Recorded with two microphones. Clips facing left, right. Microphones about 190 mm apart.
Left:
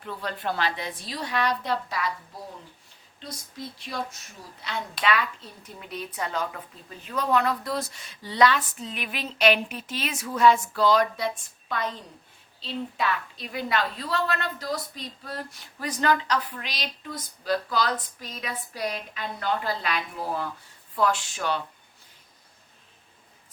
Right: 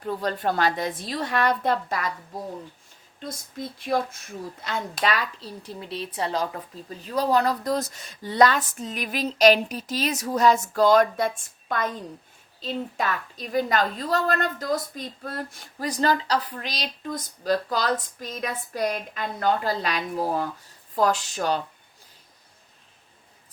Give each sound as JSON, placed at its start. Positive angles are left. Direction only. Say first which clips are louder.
{"t": 0.0, "sound": "a woman's voice", "louder": "right 6 dB", "side_deg": -40}
{"t": 3.2, "sound": "a woman's voice", "louder": "right 4 dB", "side_deg": -50}
{"t": 12.6, "sound": "a woman's voice", "louder": "right 1 dB", "side_deg": -45}